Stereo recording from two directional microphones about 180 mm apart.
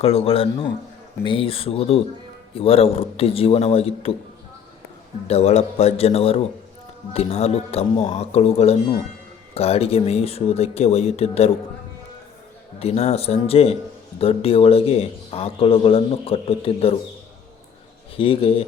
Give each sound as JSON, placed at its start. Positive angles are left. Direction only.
{"t": 0.0, "sound": "speech", "side_deg": 35}
{"t": 5.3, "sound": "speech", "side_deg": 35}
{"t": 12.8, "sound": "speech", "side_deg": 35}
{"t": 18.2, "sound": "speech", "side_deg": 30}